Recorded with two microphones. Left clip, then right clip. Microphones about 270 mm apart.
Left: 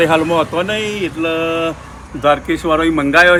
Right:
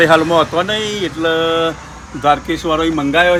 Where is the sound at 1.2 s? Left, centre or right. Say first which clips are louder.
Right 3 dB; centre.